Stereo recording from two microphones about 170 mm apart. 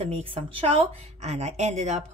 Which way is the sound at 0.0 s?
35° right (ahead or behind).